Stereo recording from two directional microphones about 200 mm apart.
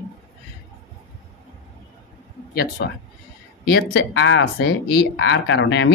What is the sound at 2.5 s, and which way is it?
Speech, 55° left (ahead or behind).